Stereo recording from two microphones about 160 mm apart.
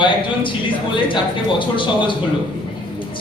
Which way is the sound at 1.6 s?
30° left (ahead or behind).